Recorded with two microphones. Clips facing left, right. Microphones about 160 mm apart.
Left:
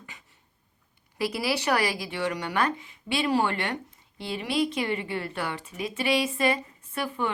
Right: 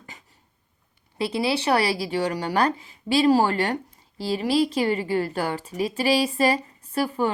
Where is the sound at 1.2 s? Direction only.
25° right (ahead or behind).